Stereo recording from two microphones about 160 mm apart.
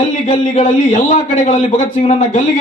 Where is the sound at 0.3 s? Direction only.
50° left (ahead or behind).